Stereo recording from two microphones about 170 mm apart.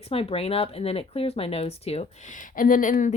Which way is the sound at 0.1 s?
35° left (ahead or behind).